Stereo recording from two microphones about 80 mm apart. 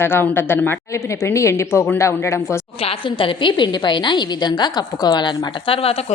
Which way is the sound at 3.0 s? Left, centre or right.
Left.